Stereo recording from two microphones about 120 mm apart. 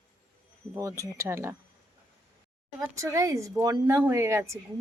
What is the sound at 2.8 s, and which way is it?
Speech, 25° right (ahead or behind).